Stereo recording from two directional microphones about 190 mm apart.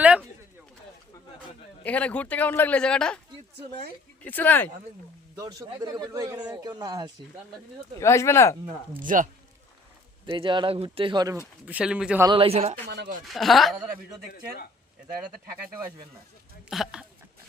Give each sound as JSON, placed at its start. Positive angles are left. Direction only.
{"t": 1.8, "sound": "a man's voice", "side_deg": 5}
{"t": 4.2, "sound": "a man's voice", "side_deg": 10}
{"t": 5.4, "sound": "a man's voice", "side_deg": -20}
{"t": 7.9, "sound": "a man's voice", "side_deg": 15}
{"t": 9.0, "sound": "speech", "side_deg": -45}
{"t": 10.2, "sound": "a man's voice", "side_deg": -25}
{"t": 11.6, "sound": "speech", "side_deg": -5}
{"t": 12.2, "sound": "a man's voice", "side_deg": -25}
{"t": 13.2, "sound": "speech", "side_deg": 0}
{"t": 16.6, "sound": "speech", "side_deg": 0}